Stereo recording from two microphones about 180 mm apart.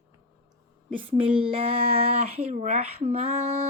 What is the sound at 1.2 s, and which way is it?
Speech, 30° right (ahead or behind).